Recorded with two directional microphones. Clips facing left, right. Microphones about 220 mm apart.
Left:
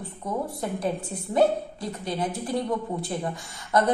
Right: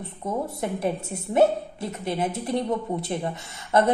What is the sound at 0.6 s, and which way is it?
A woman's voice, 25° right (ahead or behind).